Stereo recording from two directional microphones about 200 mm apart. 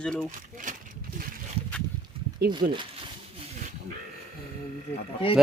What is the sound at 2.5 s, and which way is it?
Speech, 25° right (ahead or behind).